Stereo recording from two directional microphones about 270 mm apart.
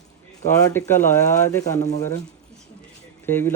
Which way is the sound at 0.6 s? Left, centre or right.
Centre.